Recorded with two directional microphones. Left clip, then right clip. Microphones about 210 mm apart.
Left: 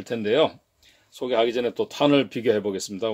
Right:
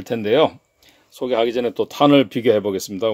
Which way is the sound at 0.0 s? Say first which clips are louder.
Right 5 dB; 30° right (ahead or behind).